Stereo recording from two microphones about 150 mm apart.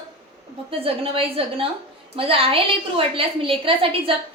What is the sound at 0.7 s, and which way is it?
A woman's voice, 40° right (ahead or behind).